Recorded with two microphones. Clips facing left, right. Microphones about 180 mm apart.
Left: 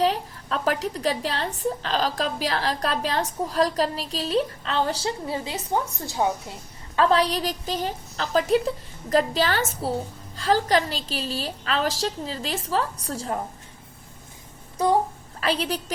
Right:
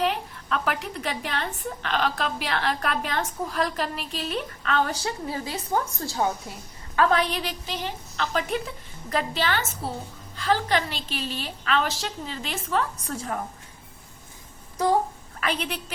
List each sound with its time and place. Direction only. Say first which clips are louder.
0.0 s a woman's voice: left 3 dB; 35° left (ahead or behind); by 6.3 s 20° left (ahead or behind)
6.9 s a woman's voice: left 2 dB; 30° left (ahead or behind)
15.4 s a woman's voice: left 4 dB; 35° left (ahead or behind)